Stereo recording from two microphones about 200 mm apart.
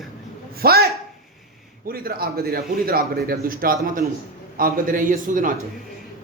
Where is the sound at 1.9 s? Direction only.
50° right (ahead or behind).